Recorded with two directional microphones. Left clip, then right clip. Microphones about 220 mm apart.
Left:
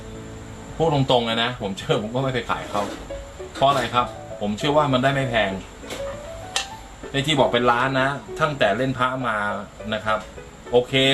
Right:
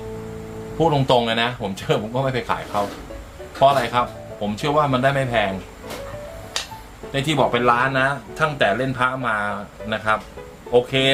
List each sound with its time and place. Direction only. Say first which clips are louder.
1.0 s speech: right 2 dB; 30° right (ahead or behind)
3.6 s speech: right 3 dB; 30° right (ahead or behind)
7.1 s speech: even; 25° right (ahead or behind)